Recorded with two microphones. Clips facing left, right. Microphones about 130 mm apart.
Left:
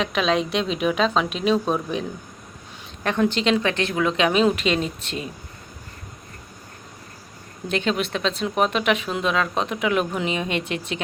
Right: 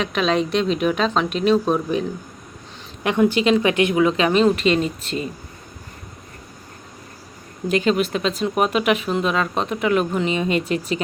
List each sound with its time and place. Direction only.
0.0 s speech: centre (ahead or behind)
3.0 s speech: 15° right (ahead or behind)
4.0 s speech: centre (ahead or behind)
7.7 s speech: 5° right (ahead or behind)